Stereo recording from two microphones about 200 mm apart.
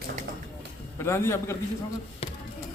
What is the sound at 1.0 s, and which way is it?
Speech, 15° left (ahead or behind).